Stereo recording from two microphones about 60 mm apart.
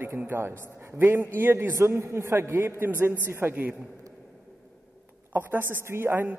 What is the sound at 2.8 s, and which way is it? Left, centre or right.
Speech, right.